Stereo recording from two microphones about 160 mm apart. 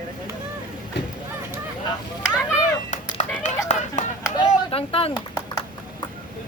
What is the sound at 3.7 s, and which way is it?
Run, 45° left (ahead or behind).